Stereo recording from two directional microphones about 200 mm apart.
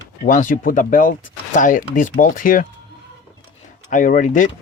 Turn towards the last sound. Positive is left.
turn(degrees=40)  # may be behind; listen again after turning